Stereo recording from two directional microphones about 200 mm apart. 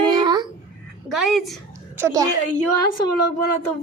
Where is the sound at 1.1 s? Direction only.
Centre (ahead or behind).